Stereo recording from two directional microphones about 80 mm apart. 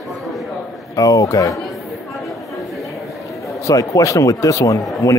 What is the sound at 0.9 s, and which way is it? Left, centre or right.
Speech, left.